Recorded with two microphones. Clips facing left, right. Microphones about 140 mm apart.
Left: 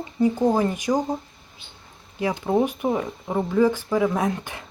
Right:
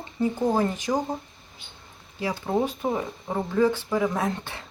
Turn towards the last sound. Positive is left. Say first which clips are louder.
# left 3 dB
turn(degrees=15)  # may be behind; listen again after turning